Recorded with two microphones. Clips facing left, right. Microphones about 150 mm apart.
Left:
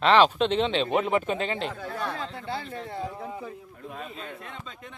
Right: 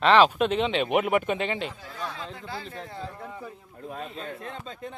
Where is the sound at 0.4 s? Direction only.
35° left (ahead or behind).